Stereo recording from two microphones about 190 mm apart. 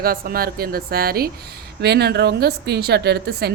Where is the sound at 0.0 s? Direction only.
50° right (ahead or behind).